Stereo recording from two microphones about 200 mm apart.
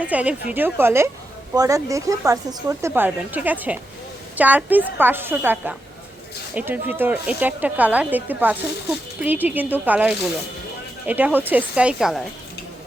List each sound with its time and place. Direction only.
0.0 s speech: 5° right (ahead or behind)